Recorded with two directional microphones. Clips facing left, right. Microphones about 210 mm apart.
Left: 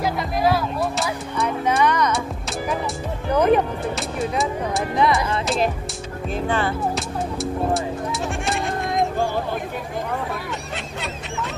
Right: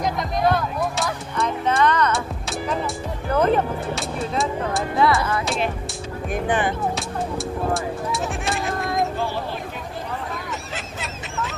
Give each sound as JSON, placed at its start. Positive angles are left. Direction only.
{"t": 0.0, "sound": "music", "side_deg": 5}
{"t": 3.3, "sound": "music", "side_deg": 15}
{"t": 3.9, "sound": "music", "side_deg": 0}
{"t": 4.9, "sound": "music", "side_deg": 20}
{"t": 6.3, "sound": "music", "side_deg": -15}
{"t": 7.0, "sound": "music", "side_deg": 0}